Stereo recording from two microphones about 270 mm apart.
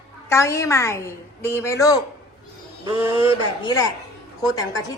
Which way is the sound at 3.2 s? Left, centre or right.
Centre.